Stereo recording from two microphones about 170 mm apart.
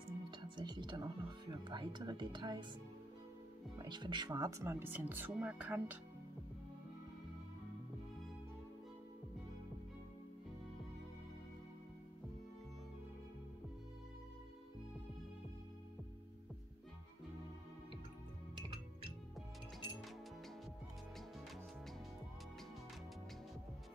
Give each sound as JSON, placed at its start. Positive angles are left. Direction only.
{"t": 0.3, "sound": "music", "side_deg": -25}
{"t": 3.7, "sound": "speech", "side_deg": -25}